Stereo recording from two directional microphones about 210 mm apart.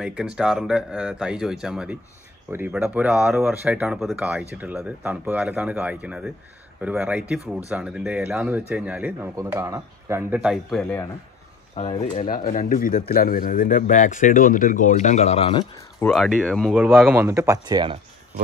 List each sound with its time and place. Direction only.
0.0 s speech: 5° right (ahead or behind)
11.7 s speech: 30° left (ahead or behind)
12.2 s speech: 40° left (ahead or behind)
16.0 s speech: centre (ahead or behind); by 17.9 s 20° right (ahead or behind)